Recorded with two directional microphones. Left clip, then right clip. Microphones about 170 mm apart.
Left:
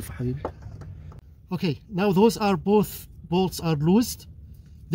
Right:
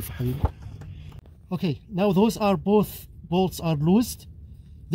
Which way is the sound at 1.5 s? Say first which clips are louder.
Left 1 dB; 15° right (ahead or behind).